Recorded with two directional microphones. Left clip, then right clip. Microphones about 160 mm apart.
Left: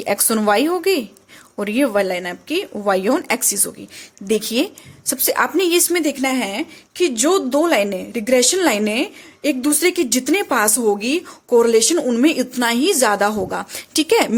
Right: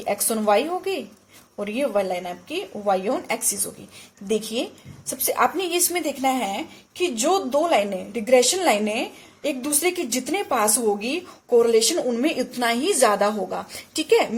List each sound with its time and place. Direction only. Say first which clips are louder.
0.0 s a woman's voice: left 5 dB; 50° left (ahead or behind)